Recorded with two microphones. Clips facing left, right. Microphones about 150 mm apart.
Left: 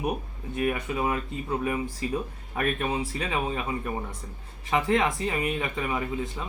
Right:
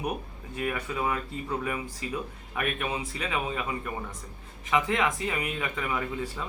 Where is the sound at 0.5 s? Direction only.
25° left (ahead or behind).